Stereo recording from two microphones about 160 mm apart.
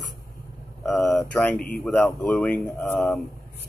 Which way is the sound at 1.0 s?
5° left (ahead or behind).